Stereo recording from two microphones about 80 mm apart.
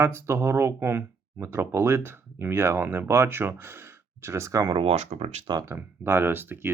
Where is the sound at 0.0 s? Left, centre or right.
Right.